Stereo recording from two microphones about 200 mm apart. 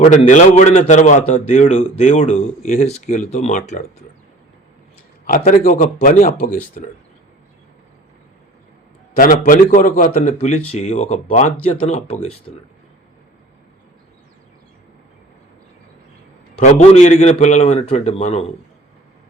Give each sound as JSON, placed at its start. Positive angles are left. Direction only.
{"t": 0.1, "sound": "speech", "side_deg": 40}
{"t": 5.2, "sound": "speech", "side_deg": 40}
{"t": 9.1, "sound": "speech", "side_deg": 45}
{"t": 16.6, "sound": "speech", "side_deg": 35}